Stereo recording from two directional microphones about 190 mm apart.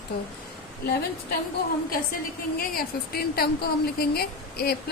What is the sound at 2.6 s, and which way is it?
A woman's voice, 50° left (ahead or behind).